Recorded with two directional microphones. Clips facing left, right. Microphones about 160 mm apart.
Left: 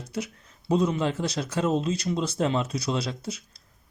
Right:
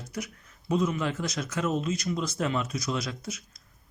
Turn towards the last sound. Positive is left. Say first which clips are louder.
# left 3 dB
turn(degrees=30)  # may be behind; listen again after turning